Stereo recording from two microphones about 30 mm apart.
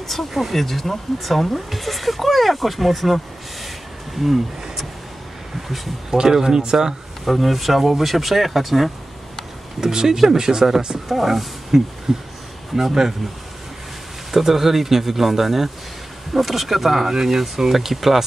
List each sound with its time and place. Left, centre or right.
0.3 s speech: centre
4.2 s speech: centre
6.0 s speech: centre
7.2 s speech: centre
9.8 s speech: centre
11.1 s speech: centre
14.3 s speech: centre